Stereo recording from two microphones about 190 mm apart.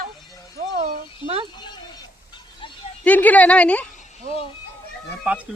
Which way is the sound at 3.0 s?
10° left (ahead or behind).